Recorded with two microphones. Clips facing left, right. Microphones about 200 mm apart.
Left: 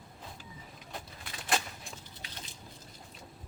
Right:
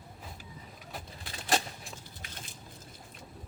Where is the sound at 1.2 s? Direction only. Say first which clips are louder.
Right 3 dB; 35° right (ahead or behind).